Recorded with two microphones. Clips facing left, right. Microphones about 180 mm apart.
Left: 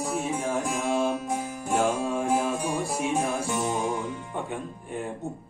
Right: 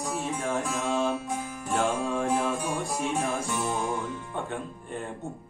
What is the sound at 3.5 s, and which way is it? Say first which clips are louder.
Music: left 2 dB; 15° left (ahead or behind).